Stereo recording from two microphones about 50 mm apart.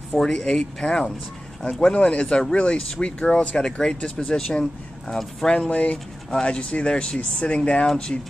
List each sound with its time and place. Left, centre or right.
0.1 s speech: centre
0.5 s speech: centre
5.7 s speech: left
7.8 s speech: centre